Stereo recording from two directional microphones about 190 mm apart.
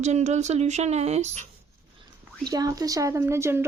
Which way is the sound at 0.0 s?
35° right (ahead or behind).